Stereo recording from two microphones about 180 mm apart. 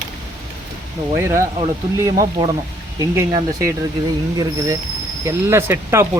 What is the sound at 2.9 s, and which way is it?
Speech, 20° right (ahead or behind).